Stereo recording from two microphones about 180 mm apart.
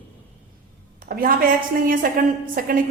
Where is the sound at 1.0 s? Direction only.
55° right (ahead or behind).